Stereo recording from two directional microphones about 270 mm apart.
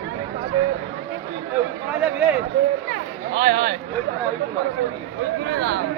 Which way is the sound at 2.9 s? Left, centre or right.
Right.